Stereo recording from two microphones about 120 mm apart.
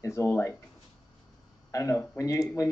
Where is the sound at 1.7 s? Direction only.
25° left (ahead or behind).